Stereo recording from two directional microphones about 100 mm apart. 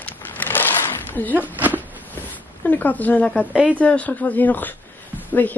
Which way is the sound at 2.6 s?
15° left (ahead or behind).